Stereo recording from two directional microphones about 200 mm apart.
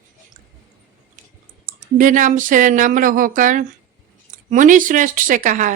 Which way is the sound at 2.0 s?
40° right (ahead or behind).